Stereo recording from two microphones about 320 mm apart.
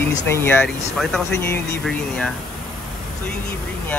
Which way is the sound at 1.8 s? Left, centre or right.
Centre.